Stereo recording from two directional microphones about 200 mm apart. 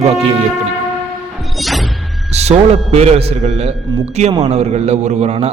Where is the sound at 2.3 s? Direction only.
30° right (ahead or behind).